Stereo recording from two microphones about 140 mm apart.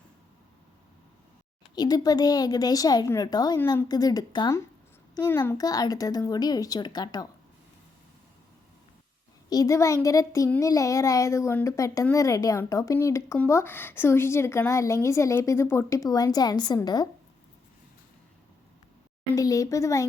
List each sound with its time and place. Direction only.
1.7 s speech: 30° left (ahead or behind)
9.5 s speech: 25° left (ahead or behind)
19.3 s speech: 25° left (ahead or behind)